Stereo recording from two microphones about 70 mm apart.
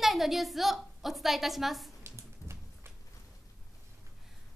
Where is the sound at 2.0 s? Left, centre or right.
Right.